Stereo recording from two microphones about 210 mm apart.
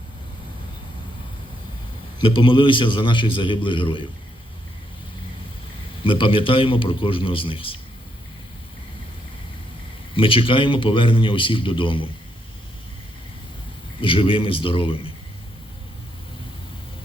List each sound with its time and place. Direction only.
2.3 s speech: 25° left (ahead or behind)
6.0 s speech: 25° left (ahead or behind)
10.2 s speech: 25° left (ahead or behind)
14.0 s speech: 25° left (ahead or behind)